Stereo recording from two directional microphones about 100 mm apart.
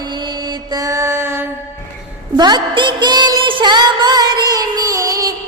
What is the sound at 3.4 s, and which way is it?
Music, 50° right (ahead or behind).